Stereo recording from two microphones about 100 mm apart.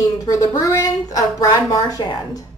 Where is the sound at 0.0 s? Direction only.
35° left (ahead or behind).